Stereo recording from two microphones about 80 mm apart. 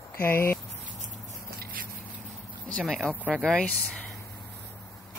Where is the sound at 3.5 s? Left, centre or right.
Centre.